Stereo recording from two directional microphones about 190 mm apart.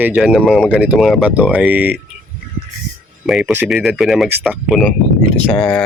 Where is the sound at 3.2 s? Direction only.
5° right (ahead or behind).